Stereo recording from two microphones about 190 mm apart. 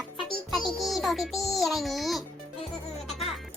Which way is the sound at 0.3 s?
Centre (ahead or behind).